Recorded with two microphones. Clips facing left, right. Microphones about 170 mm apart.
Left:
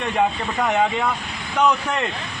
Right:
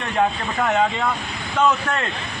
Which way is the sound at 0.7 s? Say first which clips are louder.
Even; 10° left (ahead or behind).